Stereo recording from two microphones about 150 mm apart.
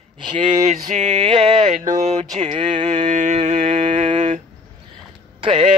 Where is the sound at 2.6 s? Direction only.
35° right (ahead or behind).